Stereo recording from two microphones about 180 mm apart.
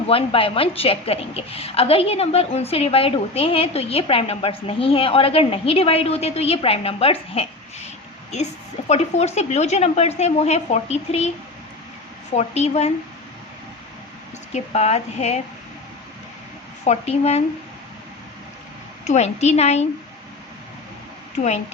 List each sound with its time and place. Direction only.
0.1 s a woman's voice: 30° left (ahead or behind)
8.9 s a woman's voice: 35° left (ahead or behind)
12.3 s a woman's voice: 40° left (ahead or behind)
14.5 s a woman's voice: 40° left (ahead or behind)
16.8 s a woman's voice: 40° left (ahead or behind)
19.0 s a woman's voice: 40° left (ahead or behind)
21.3 s a woman's voice: 40° left (ahead or behind)